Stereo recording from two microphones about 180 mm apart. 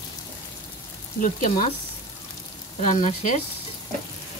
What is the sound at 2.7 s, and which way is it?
Frying, 40° left (ahead or behind).